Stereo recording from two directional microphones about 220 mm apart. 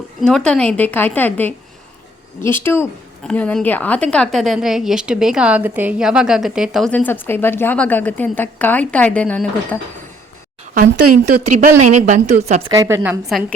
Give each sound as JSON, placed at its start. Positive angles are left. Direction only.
{"t": 0.2, "sound": "a woman's voice", "side_deg": 5}
{"t": 11.1, "sound": "a woman's voice", "side_deg": -35}
{"t": 12.7, "sound": "a woman's voice", "side_deg": -15}